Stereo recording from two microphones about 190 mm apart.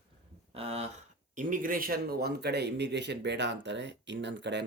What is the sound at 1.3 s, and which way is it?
Speech, 45° right (ahead or behind).